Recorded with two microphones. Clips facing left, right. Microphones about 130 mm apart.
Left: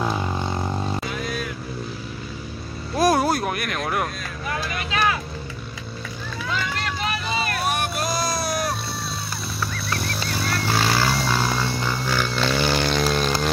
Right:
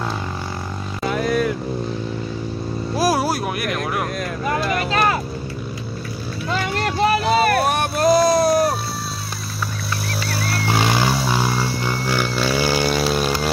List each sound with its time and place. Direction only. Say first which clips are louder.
1.0 s vehicle: right 9 dB; 45° right (ahead or behind)
3.0 s vehicle: left 1 dB; 5° right (ahead or behind)
6.5 s vehicle: right 6 dB; 45° right (ahead or behind)
8.3 s music: right 10 dB; 30° right (ahead or behind)
10.7 s a sound: right 3 dB; 15° right (ahead or behind)